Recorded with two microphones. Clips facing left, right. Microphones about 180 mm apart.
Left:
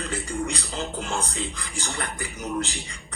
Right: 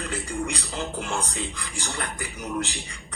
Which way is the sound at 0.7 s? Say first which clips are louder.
Even; 15° left (ahead or behind).